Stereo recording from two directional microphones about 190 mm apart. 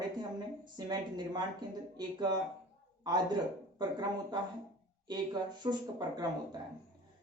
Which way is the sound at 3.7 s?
20° right (ahead or behind).